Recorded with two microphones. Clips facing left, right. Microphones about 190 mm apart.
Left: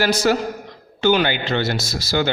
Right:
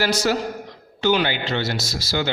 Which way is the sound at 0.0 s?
55° left (ahead or behind).